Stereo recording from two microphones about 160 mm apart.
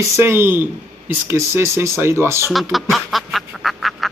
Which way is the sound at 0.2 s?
15° right (ahead or behind).